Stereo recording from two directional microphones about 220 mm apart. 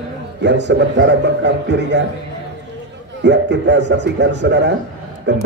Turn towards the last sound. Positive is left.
turn(degrees=-55)  # may be behind; listen again after turning